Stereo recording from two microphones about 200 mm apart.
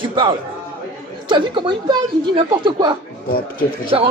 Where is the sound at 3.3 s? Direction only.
45° left (ahead or behind).